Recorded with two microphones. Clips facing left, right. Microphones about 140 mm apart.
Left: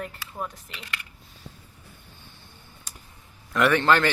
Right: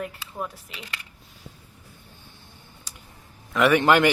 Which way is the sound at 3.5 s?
5° right (ahead or behind).